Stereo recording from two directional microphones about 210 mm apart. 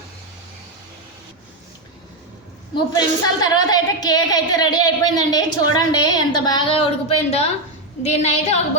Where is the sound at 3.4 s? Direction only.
20° left (ahead or behind).